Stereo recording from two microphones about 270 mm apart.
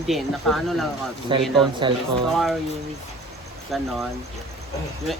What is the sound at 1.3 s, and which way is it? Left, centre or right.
Speech, centre.